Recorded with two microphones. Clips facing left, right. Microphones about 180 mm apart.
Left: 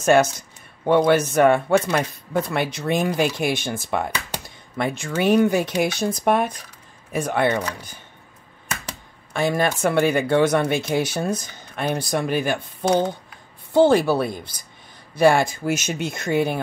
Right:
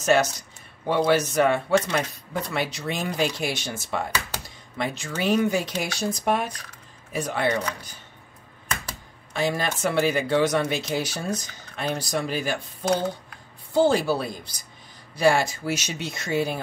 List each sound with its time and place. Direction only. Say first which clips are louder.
0.0 s speech: left 4 dB; 50° left (ahead or behind)
9.3 s speech: left 4 dB; 55° left (ahead or behind)
13.7 s speech: left 5 dB; 60° left (ahead or behind)